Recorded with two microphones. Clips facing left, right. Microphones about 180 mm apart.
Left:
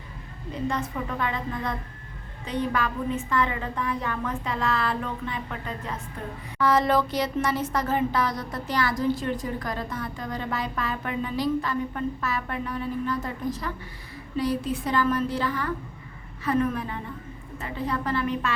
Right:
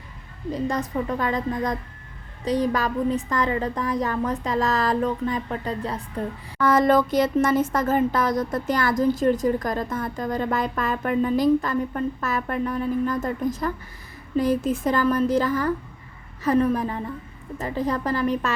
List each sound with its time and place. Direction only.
0.7 s a woman's voice: 40° right (ahead or behind)
6.6 s a woman's voice: 50° right (ahead or behind)